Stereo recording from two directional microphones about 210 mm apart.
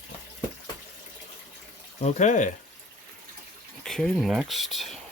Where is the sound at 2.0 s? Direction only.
35° left (ahead or behind).